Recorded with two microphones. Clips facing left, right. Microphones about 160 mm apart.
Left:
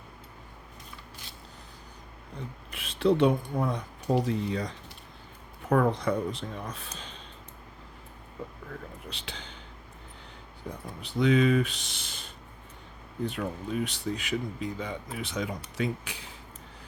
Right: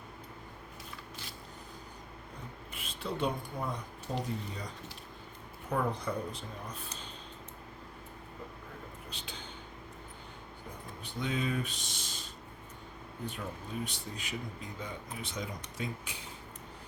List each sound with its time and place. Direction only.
2.6 s a man's voice: 85° left
9.0 s a sound: 80° left
11.0 s speech: 80° left; by 12.3 s 60° left (ahead or behind)
13.2 s speech: 75° left (ahead or behind)